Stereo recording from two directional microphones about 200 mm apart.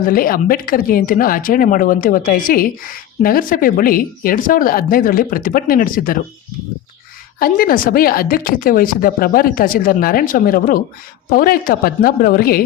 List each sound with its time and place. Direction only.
0.0 s speech: 45° left (ahead or behind)
7.3 s speech: 45° left (ahead or behind)